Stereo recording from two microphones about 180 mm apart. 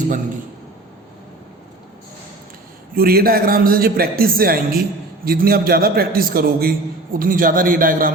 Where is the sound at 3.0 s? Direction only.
55° right (ahead or behind).